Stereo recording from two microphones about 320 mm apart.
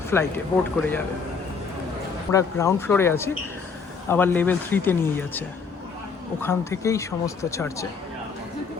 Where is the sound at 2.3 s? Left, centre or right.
Centre.